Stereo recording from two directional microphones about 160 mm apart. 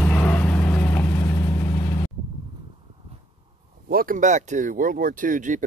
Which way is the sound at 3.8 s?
65° right (ahead or behind).